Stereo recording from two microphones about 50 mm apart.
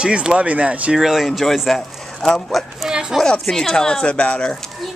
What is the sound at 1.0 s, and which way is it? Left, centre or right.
A woman's voice, centre.